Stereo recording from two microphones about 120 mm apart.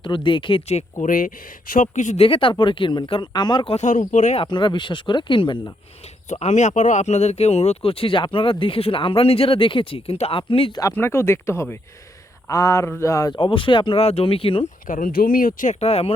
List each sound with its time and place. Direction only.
0.0 s speech: 45° left (ahead or behind)
1.0 s speech: 90° left
2.2 s speech: 45° left (ahead or behind)
3.8 s speech: 90° left
4.4 s speech: 40° left (ahead or behind)
6.2 s speech: 75° left (ahead or behind); by 10.8 s 50° left (ahead or behind)
10.9 s speech: 20° left (ahead or behind)
13.3 s speech: 45° left (ahead or behind)
15.5 s speech: 80° left; by 16.1 s 60° left (ahead or behind)